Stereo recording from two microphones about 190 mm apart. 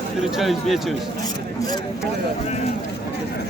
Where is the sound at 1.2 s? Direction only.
20° left (ahead or behind).